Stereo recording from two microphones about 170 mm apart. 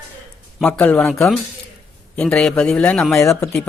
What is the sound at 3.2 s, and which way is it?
Speech, 15° left (ahead or behind).